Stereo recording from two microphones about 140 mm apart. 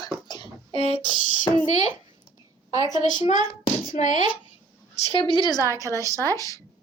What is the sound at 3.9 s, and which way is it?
Speech, 65° left (ahead or behind).